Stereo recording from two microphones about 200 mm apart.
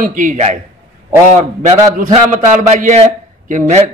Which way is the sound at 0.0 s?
40° right (ahead or behind).